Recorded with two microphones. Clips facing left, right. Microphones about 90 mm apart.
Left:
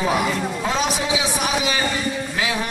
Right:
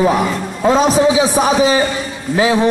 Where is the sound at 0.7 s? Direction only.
40° right (ahead or behind).